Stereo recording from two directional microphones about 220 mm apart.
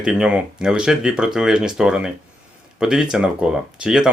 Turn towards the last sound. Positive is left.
turn(degrees=-5)  # may be behind; listen again after turning